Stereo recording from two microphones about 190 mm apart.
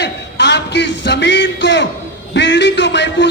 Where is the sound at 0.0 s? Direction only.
65° left (ahead or behind).